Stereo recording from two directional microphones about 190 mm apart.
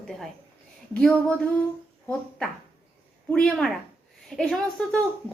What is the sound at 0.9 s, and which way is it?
Speech, 5° left (ahead or behind).